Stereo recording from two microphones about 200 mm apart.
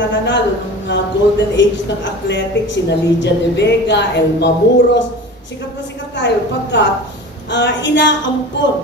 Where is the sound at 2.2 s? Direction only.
60° left (ahead or behind).